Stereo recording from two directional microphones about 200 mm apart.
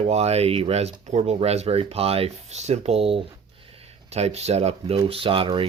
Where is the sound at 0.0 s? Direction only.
30° right (ahead or behind).